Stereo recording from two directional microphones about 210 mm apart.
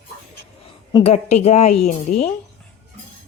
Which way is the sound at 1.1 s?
30° left (ahead or behind).